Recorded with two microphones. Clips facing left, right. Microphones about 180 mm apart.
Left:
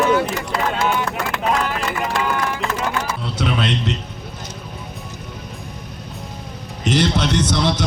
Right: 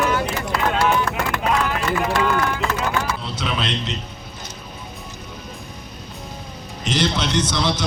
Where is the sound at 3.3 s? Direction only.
60° left (ahead or behind).